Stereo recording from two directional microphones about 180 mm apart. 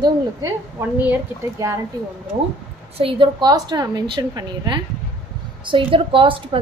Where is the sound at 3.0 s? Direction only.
30° right (ahead or behind).